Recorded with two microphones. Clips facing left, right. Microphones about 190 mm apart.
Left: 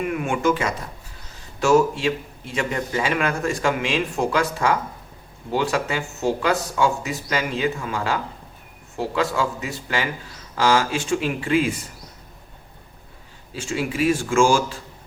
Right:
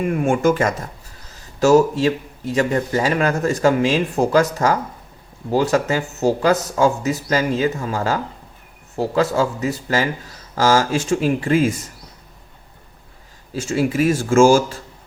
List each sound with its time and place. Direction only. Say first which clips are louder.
0.1 s a man's voice: right 6 dB; 40° right (ahead or behind)
13.5 s speech: right 6 dB; 40° right (ahead or behind)